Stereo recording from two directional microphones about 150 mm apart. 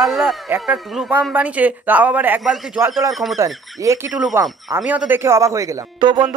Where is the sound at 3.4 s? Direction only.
20° right (ahead or behind).